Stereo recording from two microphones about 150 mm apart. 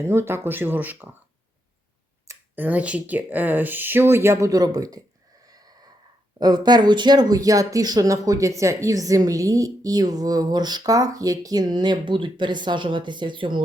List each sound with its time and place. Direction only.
0.0 s speech: 15° right (ahead or behind)
2.2 s speech: 15° right (ahead or behind)
5.5 s a sound: 25° right (ahead or behind)
6.4 s speech: 25° right (ahead or behind)